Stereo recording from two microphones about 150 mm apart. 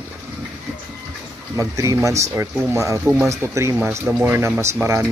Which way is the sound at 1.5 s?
20° right (ahead or behind).